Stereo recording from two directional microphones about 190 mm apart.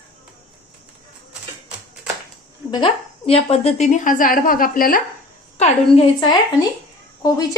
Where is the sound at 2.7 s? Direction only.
25° left (ahead or behind); by 5.0 s 50° left (ahead or behind).